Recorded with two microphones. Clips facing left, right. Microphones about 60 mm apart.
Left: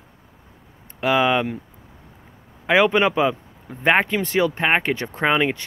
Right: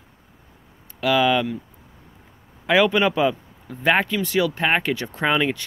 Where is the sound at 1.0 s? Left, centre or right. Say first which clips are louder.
Even; left.